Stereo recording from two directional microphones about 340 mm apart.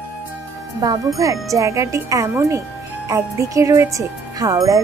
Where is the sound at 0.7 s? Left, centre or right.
Centre.